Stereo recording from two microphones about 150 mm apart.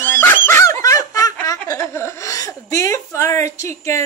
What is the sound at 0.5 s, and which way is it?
Snicker, 20° left (ahead or behind).